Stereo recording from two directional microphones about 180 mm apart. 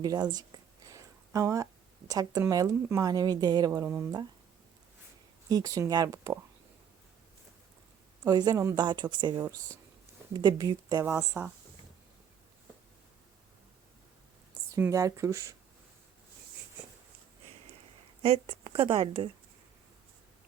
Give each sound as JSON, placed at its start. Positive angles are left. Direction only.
{"t": 0.0, "sound": "a sound", "side_deg": -20}
{"t": 2.0, "sound": "speech", "side_deg": -20}
{"t": 5.5, "sound": "speech", "side_deg": -20}
{"t": 8.2, "sound": "speech", "side_deg": -25}
{"t": 14.8, "sound": "speech", "side_deg": -15}
{"t": 18.2, "sound": "speech", "side_deg": -30}